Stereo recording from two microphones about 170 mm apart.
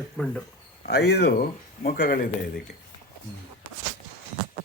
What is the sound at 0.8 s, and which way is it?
Speech, 75° left (ahead or behind).